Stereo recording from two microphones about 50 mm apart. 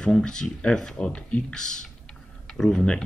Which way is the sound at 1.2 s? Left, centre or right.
Left.